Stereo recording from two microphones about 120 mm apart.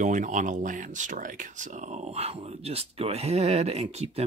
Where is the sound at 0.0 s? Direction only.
90° right.